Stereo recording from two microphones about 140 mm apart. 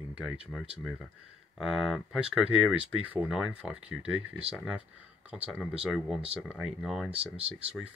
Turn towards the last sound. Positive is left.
turn(degrees=-10)  # may be behind; listen again after turning